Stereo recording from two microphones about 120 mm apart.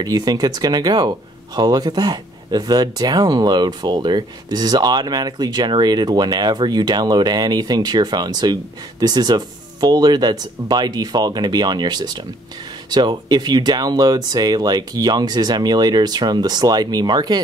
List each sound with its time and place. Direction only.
0.0 s speech: 35° right (ahead or behind)